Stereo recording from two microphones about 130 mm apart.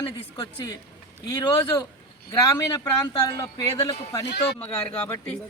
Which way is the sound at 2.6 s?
30° left (ahead or behind).